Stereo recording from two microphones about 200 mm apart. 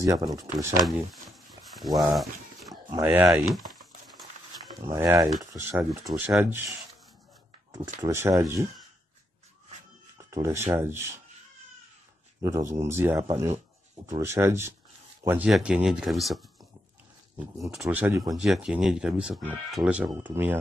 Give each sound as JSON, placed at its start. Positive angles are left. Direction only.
{"t": 0.0, "sound": "speech", "side_deg": -20}
{"t": 1.5, "sound": "a sound", "side_deg": 0}
{"t": 2.1, "sound": "dog", "side_deg": 0}
{"t": 3.0, "sound": "speech", "side_deg": -10}
{"t": 4.8, "sound": "speech", "side_deg": -15}
{"t": 7.7, "sound": "speech", "side_deg": -20}
{"t": 10.1, "sound": "a sound", "side_deg": -15}
{"t": 10.7, "sound": "speech", "side_deg": -10}
{"t": 12.4, "sound": "speech", "side_deg": -15}
{"t": 17.7, "sound": "speech", "side_deg": -5}